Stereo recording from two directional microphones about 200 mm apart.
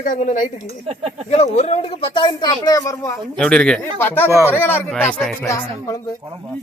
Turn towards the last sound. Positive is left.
turn(degrees=15)  # may be behind; listen again after turning